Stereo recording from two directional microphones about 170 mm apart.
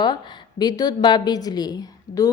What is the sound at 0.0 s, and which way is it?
A woman's voice, 25° left (ahead or behind).